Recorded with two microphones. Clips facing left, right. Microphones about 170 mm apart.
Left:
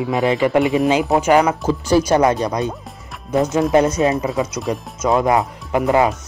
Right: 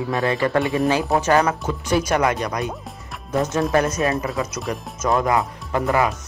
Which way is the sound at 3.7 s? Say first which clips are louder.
Left 5 dB; 25° left (ahead or behind).